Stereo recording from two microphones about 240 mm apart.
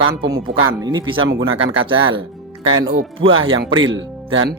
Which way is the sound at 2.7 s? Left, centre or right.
Centre.